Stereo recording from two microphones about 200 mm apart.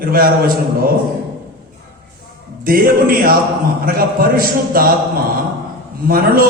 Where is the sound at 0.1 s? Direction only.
45° right (ahead or behind).